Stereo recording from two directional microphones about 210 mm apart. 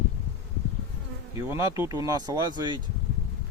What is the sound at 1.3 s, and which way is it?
Speech, 15° right (ahead or behind).